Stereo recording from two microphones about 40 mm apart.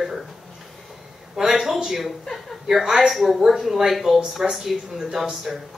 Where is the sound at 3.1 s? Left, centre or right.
Centre.